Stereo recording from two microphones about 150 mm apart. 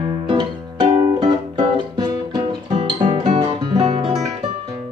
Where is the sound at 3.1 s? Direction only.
35° right (ahead or behind).